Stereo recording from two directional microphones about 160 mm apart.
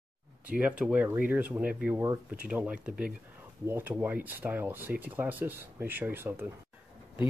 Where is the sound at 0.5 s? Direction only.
10° right (ahead or behind).